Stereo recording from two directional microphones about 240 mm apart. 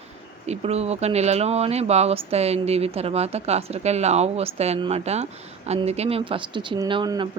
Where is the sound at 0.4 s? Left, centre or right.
Right.